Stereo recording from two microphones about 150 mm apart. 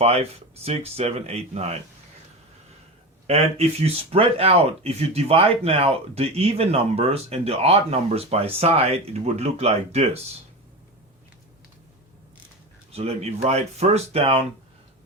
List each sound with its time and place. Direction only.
0.0 s speech: 45° right (ahead or behind)
3.2 s speech: 45° right (ahead or behind)
12.9 s speech: 45° right (ahead or behind)